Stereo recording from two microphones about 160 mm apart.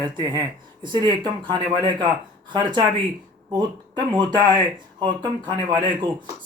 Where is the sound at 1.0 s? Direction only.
25° right (ahead or behind).